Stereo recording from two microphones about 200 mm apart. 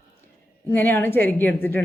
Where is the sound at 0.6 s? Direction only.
10° left (ahead or behind).